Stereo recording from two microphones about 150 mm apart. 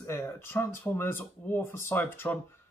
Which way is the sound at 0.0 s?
15° left (ahead or behind).